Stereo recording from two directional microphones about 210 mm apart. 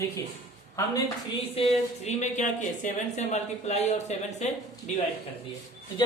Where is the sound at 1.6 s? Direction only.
30° left (ahead or behind).